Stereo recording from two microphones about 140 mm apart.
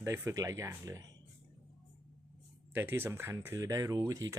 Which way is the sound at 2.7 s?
15° right (ahead or behind).